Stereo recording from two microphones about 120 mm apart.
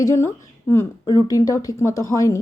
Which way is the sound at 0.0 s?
25° left (ahead or behind).